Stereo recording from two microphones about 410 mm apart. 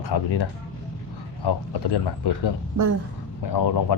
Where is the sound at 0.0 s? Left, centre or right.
Left.